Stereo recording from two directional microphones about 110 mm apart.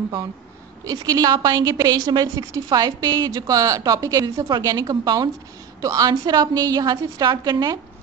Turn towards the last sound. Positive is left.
turn(degrees=-40)  # may be behind; listen again after turning